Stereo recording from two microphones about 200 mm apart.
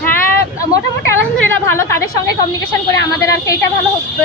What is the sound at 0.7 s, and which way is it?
A woman's voice, 15° left (ahead or behind).